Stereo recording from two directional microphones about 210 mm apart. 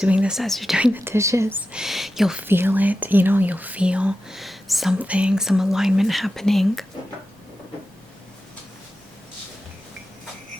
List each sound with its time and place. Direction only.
0.0 s speech: 5° right (ahead or behind)